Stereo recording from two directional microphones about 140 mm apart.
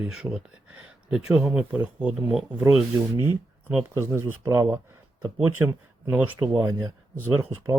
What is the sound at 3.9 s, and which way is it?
Speech, 20° right (ahead or behind).